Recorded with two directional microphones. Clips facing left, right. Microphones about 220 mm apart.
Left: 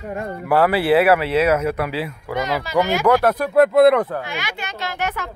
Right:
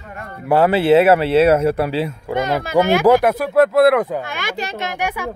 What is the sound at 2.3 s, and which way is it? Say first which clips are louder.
Speech: right 3 dB; 50° right (ahead or behind).